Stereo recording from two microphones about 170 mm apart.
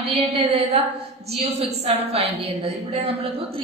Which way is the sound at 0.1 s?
35° right (ahead or behind).